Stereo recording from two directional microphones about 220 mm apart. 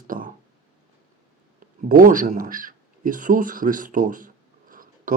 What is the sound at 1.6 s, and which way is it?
Speech, 40° right (ahead or behind).